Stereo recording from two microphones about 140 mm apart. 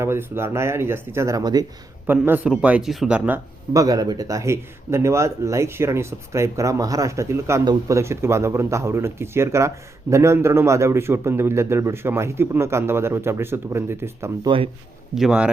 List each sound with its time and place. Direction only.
0.0 s speech: 15° right (ahead or behind)
2.0 s a man's voice: 15° right (ahead or behind)
3.7 s speech: 25° right (ahead or behind)
14.4 s speech: 40° right (ahead or behind)
15.1 s speech: 5° right (ahead or behind)